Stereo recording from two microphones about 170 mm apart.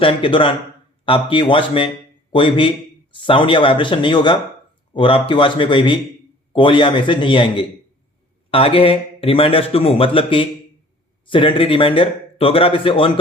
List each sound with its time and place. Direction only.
0.0 s speech: 30° left (ahead or behind)